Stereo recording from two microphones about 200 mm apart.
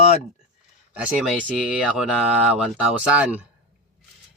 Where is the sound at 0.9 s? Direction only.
5° right (ahead or behind).